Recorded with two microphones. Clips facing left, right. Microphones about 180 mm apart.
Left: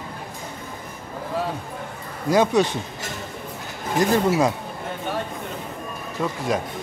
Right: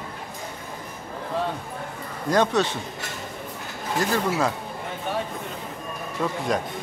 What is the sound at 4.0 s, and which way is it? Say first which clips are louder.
Speech: left 5 dB; 15° left (ahead or behind).